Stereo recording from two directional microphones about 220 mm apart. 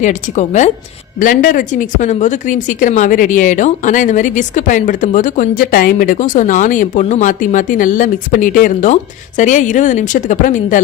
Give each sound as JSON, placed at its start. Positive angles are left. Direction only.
{"t": 0.0, "sound": "speech", "side_deg": 35}